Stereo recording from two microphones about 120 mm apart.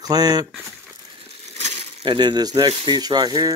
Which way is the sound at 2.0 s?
40° right (ahead or behind).